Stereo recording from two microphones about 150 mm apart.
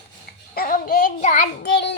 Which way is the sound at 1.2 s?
60° left (ahead or behind).